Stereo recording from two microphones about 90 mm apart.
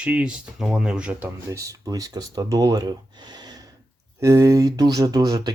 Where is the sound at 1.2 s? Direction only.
35° right (ahead or behind).